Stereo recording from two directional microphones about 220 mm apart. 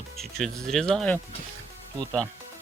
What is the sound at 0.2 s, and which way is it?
Speech, centre (ahead or behind).